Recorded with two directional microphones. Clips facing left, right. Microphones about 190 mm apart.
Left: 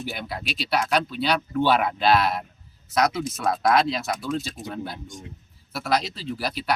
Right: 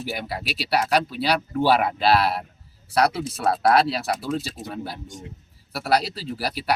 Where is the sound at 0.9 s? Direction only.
35° right (ahead or behind).